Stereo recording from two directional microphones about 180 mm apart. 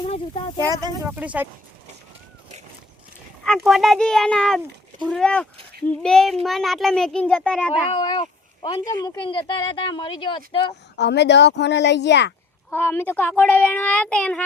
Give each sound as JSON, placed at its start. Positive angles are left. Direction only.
{"t": 0.0, "sound": "speech", "side_deg": 30}
{"t": 0.7, "sound": "speech", "side_deg": -15}
{"t": 3.4, "sound": "a child's voice", "side_deg": 0}
{"t": 7.9, "sound": "speech", "side_deg": 25}
{"t": 10.9, "sound": "a woman's voice", "side_deg": 70}
{"t": 12.7, "sound": "a child's voice", "side_deg": 10}